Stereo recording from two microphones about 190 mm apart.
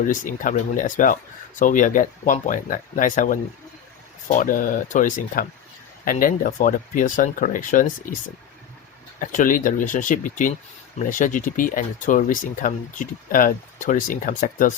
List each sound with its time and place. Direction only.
0.1 s speech: 45° left (ahead or behind)
9.2 s speech: 45° left (ahead or behind)